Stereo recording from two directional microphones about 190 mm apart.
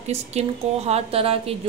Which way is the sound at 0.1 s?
35° right (ahead or behind).